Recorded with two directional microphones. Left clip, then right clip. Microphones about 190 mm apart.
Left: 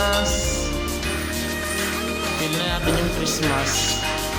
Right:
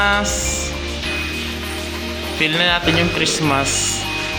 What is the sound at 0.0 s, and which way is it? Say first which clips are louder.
Music: right 4 dB; 30° right (ahead or behind).